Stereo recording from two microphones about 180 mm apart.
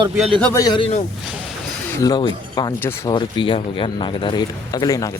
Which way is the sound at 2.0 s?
20° left (ahead or behind).